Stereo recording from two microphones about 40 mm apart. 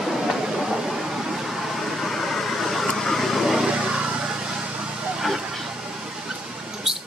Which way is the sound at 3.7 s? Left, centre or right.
Centre.